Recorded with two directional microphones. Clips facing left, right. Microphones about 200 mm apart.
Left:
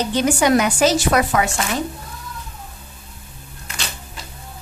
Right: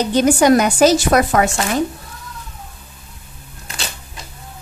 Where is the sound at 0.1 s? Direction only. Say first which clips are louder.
Right 5 dB; 40° right (ahead or behind).